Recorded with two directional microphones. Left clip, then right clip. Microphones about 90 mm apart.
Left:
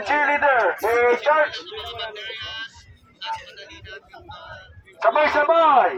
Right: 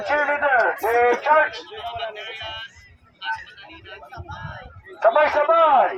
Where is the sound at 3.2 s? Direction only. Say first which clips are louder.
Right 2 dB; 15° left (ahead or behind).